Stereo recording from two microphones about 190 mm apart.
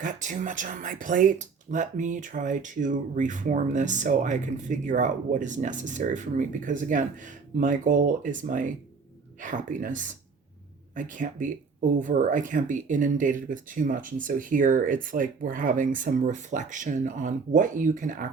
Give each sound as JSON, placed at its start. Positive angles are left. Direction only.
{"t": 0.0, "sound": "speech", "side_deg": -40}